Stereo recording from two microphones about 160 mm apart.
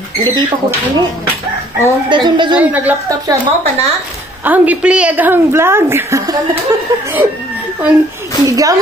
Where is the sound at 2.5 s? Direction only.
10° right (ahead or behind).